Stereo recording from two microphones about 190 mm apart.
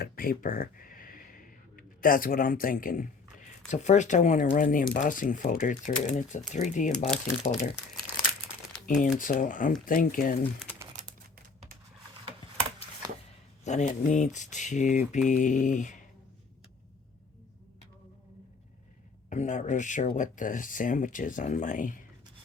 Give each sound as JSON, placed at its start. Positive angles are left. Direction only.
{"t": 0.0, "sound": "a sound", "side_deg": 50}
{"t": 3.7, "sound": "speech", "side_deg": 40}
{"t": 8.9, "sound": "speech", "side_deg": 45}
{"t": 12.2, "sound": "a sound", "side_deg": -25}
{"t": 13.7, "sound": "speech", "side_deg": 40}
{"t": 19.3, "sound": "speech", "side_deg": 40}